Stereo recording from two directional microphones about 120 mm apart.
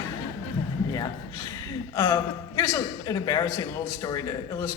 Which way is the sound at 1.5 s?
30° left (ahead or behind).